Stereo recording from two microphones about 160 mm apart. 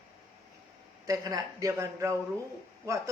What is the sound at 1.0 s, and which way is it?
Speech, 20° right (ahead or behind).